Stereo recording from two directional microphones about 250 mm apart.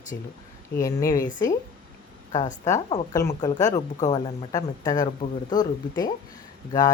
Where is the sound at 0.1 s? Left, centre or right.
Left.